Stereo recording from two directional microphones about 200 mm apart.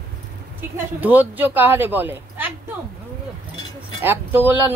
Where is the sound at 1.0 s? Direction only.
10° right (ahead or behind).